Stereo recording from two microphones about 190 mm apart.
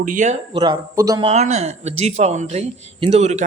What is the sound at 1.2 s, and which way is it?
Speech, 35° right (ahead or behind).